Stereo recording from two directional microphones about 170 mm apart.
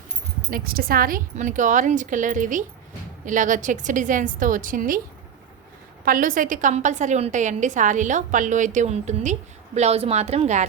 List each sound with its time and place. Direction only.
0.5 s a woman's voice: 60° right (ahead or behind)
6.1 s a woman's voice: 55° right (ahead or behind)